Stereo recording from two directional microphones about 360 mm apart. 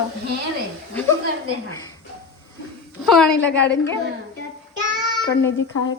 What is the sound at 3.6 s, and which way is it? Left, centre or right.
Speech, left.